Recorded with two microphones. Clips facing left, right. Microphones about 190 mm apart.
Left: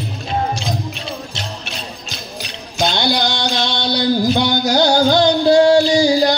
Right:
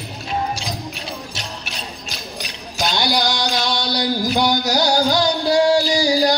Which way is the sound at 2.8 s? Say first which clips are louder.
Left 3 dB; 25° left (ahead or behind).